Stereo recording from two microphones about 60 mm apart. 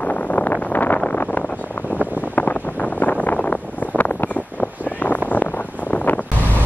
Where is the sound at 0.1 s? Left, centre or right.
Left.